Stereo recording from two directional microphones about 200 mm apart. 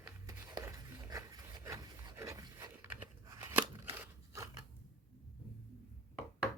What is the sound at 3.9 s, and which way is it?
Crunch, 15° right (ahead or behind).